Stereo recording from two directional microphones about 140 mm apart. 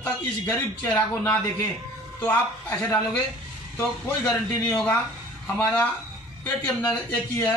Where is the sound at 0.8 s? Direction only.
10° left (ahead or behind).